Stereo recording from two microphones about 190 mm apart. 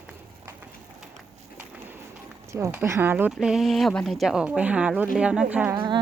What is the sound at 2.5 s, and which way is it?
Speech, 15° right (ahead or behind).